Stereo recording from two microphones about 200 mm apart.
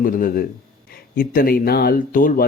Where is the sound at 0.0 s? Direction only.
45° left (ahead or behind).